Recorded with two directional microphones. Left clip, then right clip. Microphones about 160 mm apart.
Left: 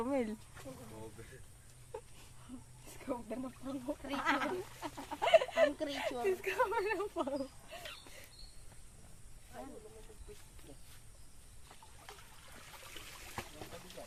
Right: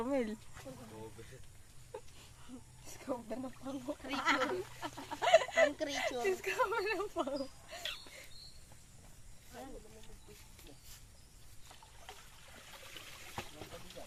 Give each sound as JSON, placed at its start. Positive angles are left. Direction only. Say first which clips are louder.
{"t": 0.0, "sound": "speech", "louder": "even", "side_deg": -5}
{"t": 1.9, "sound": "a sound", "louder": "left 1 dB", "side_deg": 0}
{"t": 2.8, "sound": "speech", "louder": "right 1 dB", "side_deg": -25}
{"t": 4.0, "sound": "speech", "louder": "right 2 dB", "side_deg": -15}
{"t": 12.5, "sound": "trickle", "louder": "even", "side_deg": 0}